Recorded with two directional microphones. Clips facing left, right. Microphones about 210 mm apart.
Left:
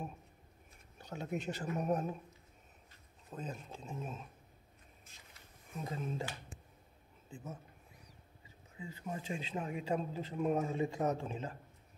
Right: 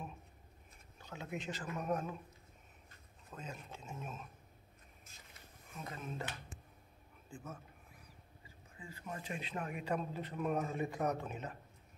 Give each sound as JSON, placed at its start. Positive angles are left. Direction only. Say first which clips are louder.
{"t": 0.9, "sound": "a sound", "louder": "left 5 dB", "side_deg": 40}
{"t": 1.7, "sound": "speech", "louder": "left 3 dB", "side_deg": 35}
{"t": 3.3, "sound": "speech", "louder": "left 4 dB", "side_deg": 35}
{"t": 5.8, "sound": "a man's voice", "louder": "left 5 dB", "side_deg": 30}
{"t": 7.2, "sound": "a man's voice", "louder": "left 2 dB", "side_deg": 20}
{"t": 8.7, "sound": "a man's voice", "louder": "left 4 dB", "side_deg": 25}